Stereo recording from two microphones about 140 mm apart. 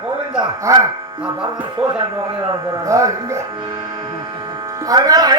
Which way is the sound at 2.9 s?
20° right (ahead or behind).